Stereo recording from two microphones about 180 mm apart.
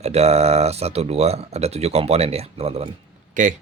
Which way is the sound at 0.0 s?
35° right (ahead or behind).